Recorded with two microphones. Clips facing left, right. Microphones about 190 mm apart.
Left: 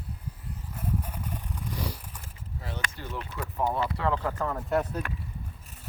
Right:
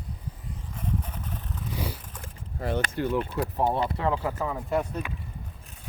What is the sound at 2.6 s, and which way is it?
Speech, 55° right (ahead or behind).